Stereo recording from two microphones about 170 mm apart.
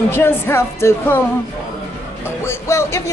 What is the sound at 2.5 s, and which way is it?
Speech, 15° left (ahead or behind).